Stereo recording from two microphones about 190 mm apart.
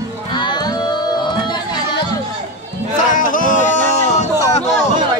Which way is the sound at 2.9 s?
45° left (ahead or behind).